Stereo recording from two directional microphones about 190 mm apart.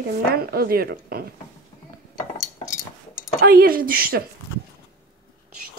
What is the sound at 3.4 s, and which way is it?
Speech, 50° right (ahead or behind).